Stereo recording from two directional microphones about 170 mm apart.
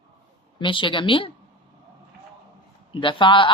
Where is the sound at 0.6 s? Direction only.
30° left (ahead or behind).